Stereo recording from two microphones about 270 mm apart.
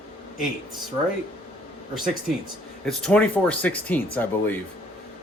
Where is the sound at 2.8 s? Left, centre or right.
Centre.